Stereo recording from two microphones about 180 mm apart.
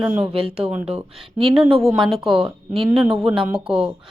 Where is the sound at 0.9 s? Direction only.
30° right (ahead or behind).